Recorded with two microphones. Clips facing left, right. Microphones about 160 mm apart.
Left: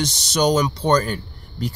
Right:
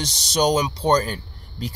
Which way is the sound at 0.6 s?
10° right (ahead or behind).